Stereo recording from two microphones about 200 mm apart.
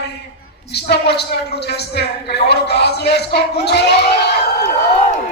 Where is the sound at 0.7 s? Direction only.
55° left (ahead or behind).